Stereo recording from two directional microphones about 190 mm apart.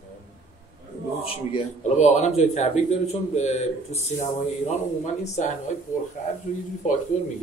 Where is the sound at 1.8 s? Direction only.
40° left (ahead or behind).